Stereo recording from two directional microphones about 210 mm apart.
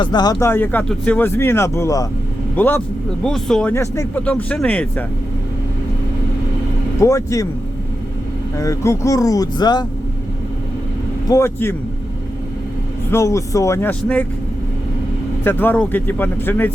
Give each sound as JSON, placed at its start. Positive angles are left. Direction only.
{"t": 0.0, "sound": "speech", "side_deg": 20}
{"t": 7.0, "sound": "speech", "side_deg": 15}
{"t": 8.5, "sound": "speech", "side_deg": 15}
{"t": 11.3, "sound": "speech", "side_deg": 10}
{"t": 13.1, "sound": "speech", "side_deg": 15}
{"t": 15.4, "sound": "speech", "side_deg": 10}